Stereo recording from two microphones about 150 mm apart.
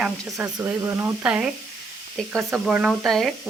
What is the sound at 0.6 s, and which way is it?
Speech, 20° right (ahead or behind).